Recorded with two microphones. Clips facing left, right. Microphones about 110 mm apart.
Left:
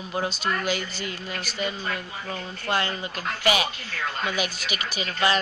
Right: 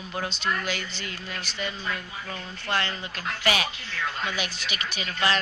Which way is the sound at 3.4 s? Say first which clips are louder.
Left 3 dB; 10° left (ahead or behind).